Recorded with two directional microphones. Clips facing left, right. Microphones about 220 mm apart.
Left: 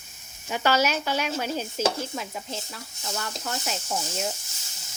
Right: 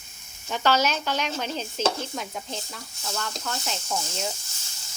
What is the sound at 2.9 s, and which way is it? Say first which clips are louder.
Speech: right 1 dB; 20° left (ahead or behind).